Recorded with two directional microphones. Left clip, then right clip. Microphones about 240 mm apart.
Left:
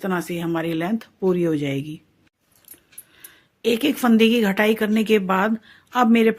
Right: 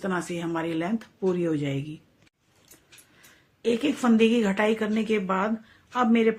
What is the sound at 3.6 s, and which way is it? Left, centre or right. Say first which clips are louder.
Speech: left 5 dB; left.